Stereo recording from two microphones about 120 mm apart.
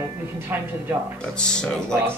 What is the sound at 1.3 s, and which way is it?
Speech, 5° left (ahead or behind).